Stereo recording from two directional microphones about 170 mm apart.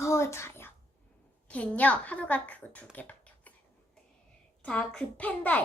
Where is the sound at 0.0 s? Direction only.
15° left (ahead or behind).